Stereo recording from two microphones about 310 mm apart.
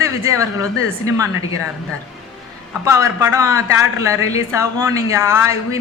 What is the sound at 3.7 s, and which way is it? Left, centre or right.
Speech, left.